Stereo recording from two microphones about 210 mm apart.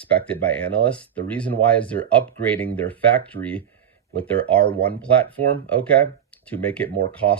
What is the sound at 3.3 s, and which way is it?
Speech, 65° right (ahead or behind).